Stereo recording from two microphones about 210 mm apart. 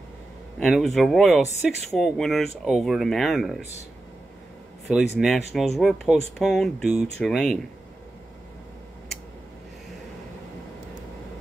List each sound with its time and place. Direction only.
0.6 s speech: centre (ahead or behind)
5.2 s speech: centre (ahead or behind)